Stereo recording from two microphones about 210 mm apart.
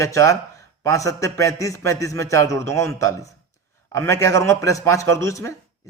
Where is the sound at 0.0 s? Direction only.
15° left (ahead or behind).